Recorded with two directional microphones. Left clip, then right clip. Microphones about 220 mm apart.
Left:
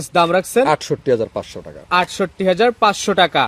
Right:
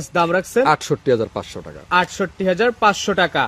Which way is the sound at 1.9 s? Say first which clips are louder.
Left 1 dB; 25° left (ahead or behind).